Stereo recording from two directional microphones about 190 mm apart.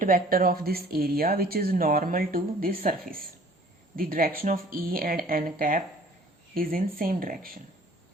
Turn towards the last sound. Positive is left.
turn(degrees=-50)  # may be behind; listen again after turning